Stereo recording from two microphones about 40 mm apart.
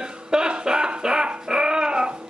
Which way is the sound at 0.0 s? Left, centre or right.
Centre.